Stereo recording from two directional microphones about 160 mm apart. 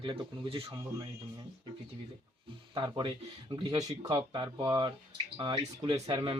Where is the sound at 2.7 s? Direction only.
30° right (ahead or behind).